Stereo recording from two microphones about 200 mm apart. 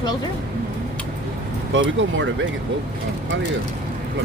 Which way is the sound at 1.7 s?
70° right (ahead or behind).